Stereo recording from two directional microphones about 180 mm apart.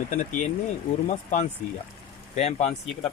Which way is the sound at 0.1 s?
45° left (ahead or behind).